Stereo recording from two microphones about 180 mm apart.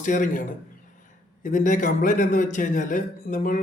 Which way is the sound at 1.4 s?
45° left (ahead or behind).